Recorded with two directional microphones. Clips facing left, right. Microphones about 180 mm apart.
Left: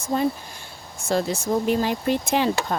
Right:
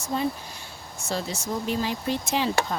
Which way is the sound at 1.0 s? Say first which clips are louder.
Left 7 dB; 55° left (ahead or behind).